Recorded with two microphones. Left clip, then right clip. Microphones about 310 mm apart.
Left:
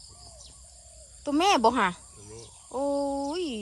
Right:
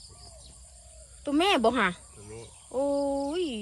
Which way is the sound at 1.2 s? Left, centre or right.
Centre.